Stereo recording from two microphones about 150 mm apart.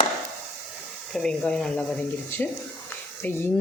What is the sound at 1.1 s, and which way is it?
Speech, 5° left (ahead or behind).